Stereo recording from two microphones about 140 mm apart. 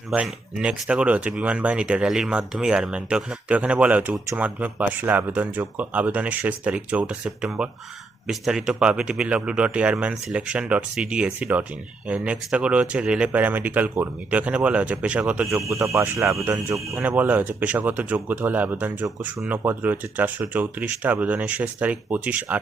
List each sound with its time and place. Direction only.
0.1 s speech: 10° right (ahead or behind)
8.3 s speech: 5° right (ahead or behind)
15.7 s speech: 20° right (ahead or behind)